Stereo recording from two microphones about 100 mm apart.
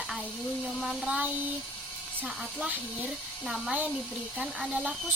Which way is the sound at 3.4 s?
Centre (ahead or behind).